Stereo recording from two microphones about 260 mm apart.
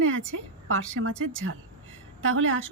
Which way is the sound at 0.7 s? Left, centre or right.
Right.